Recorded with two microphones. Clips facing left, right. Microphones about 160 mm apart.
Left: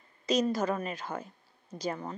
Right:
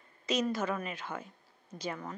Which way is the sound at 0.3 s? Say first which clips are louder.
Left 4 dB; 40° left (ahead or behind).